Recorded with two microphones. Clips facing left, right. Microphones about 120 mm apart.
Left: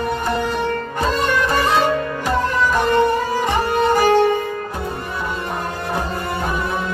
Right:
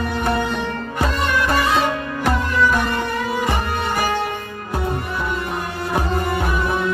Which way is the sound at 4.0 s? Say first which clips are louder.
Left 8 dB; 40° left (ahead or behind).